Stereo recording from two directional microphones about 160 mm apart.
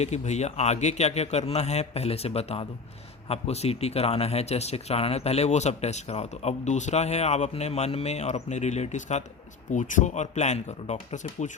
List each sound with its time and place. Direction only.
0.0 s speech: 45° left (ahead or behind)